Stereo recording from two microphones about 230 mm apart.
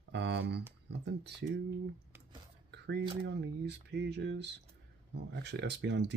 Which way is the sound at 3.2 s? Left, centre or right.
Right.